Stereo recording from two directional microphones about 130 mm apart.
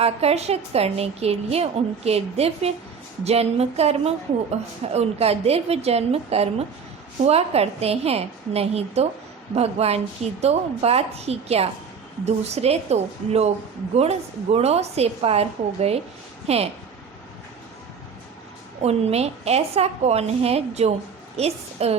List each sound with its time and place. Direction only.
0.0 s a woman's voice: 55° right (ahead or behind)
18.8 s a woman's voice: 55° right (ahead or behind)